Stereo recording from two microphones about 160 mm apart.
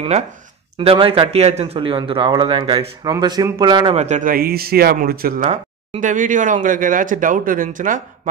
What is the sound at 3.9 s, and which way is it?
Speech, 45° right (ahead or behind).